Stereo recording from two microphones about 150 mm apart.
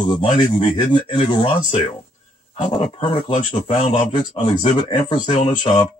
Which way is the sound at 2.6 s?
35° left (ahead or behind).